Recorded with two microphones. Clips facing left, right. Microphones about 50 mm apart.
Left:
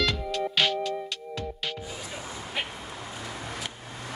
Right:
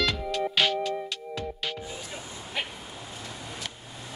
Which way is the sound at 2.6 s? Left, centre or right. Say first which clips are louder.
Even; centre.